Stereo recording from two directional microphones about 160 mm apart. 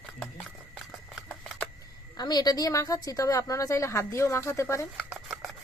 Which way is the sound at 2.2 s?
25° left (ahead or behind).